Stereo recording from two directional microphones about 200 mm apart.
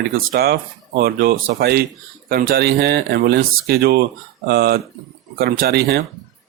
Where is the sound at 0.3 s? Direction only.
50° right (ahead or behind).